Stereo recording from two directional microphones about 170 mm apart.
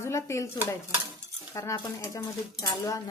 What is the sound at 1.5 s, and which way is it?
Speech, 20° left (ahead or behind).